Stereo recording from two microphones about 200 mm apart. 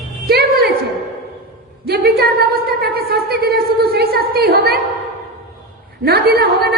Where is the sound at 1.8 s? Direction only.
50° right (ahead or behind).